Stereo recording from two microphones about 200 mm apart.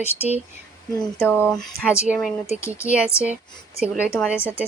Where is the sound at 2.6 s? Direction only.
15° left (ahead or behind).